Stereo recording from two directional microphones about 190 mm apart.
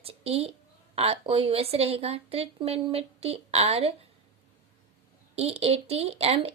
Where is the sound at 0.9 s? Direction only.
30° right (ahead or behind).